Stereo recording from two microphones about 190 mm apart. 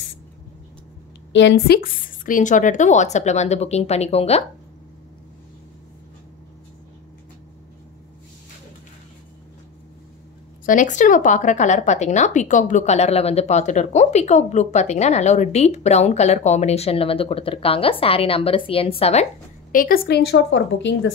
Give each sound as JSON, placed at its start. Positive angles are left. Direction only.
{"t": 1.3, "sound": "speech", "side_deg": 70}
{"t": 10.6, "sound": "speech", "side_deg": 45}
{"t": 19.7, "sound": "a woman's voice", "side_deg": 50}